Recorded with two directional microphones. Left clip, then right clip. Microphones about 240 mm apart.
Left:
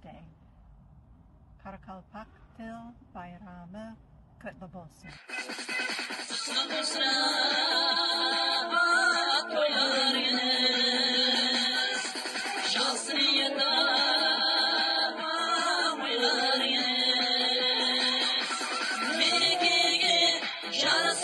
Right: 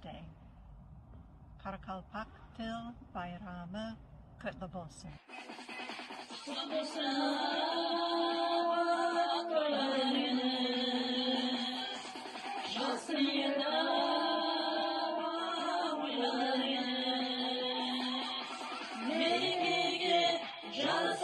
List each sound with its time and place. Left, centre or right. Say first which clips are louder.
1.6 s a man's voice: right 2 dB; centre
3.1 s mantra: right 2 dB; centre
4.6 s a woman's voice: right 2 dB; centre
5.3 s music: left 12 dB; left